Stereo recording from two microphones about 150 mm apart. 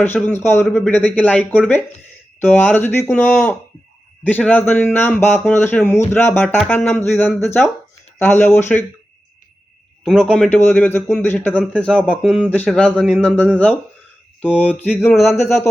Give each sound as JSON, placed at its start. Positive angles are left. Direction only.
{"t": 0.0, "sound": "speech", "side_deg": 15}
{"t": 10.0, "sound": "speech", "side_deg": 5}